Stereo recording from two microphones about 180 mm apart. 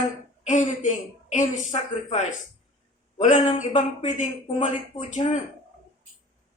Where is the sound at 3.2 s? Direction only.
40° left (ahead or behind).